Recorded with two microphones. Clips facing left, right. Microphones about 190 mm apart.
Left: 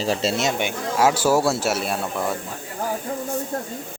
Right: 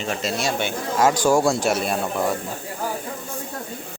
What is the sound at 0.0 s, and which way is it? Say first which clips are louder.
Speech: left 3 dB; 30° left (ahead or behind).